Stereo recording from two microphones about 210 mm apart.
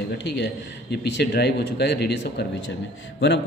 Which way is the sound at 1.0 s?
50° left (ahead or behind).